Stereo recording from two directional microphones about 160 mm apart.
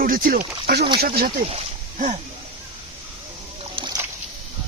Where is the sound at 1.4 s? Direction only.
45° right (ahead or behind).